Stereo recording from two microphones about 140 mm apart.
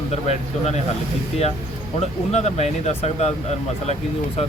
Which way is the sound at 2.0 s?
50° left (ahead or behind).